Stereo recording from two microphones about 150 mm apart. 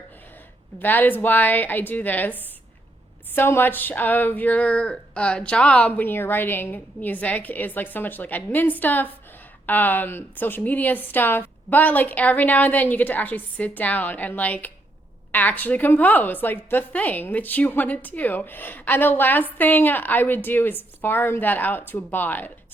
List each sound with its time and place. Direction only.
0.8 s speech: 10° left (ahead or behind)